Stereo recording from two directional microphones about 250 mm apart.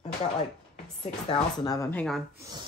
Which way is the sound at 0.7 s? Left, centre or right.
Left.